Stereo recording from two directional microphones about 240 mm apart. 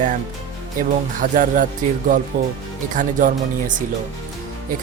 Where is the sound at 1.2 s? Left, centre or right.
Right.